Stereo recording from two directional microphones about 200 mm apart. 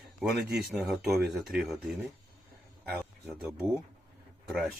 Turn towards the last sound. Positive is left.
turn(degrees=0)  # may be behind; listen again after turning